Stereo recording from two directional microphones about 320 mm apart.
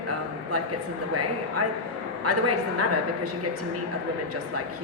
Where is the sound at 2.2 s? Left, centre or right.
Right.